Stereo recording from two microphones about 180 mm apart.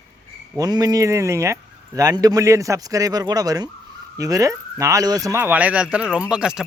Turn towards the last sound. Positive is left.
turn(degrees=-5)  # may be behind; listen again after turning